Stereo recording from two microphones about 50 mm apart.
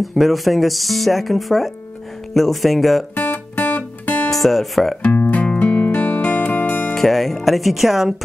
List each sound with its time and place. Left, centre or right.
0.0 s speech: centre
3.2 s music: left
4.3 s speech: centre
5.1 s music: left
6.9 s speech: centre